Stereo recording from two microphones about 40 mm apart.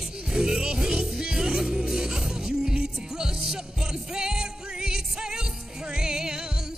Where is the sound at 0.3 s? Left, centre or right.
Centre.